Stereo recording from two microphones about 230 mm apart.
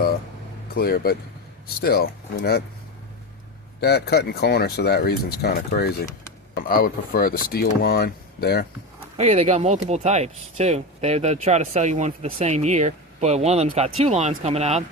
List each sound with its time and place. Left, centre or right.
0.8 s speech: left
3.8 s speech: left
9.1 s speech: right